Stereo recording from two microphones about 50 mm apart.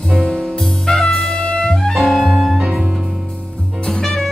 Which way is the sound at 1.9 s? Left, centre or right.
Centre.